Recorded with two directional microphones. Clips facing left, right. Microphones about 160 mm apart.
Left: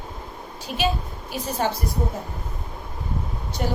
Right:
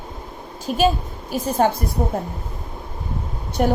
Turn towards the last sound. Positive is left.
turn(degrees=-55)  # may be behind; listen again after turning